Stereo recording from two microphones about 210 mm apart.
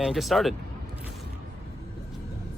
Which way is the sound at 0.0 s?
Centre (ahead or behind).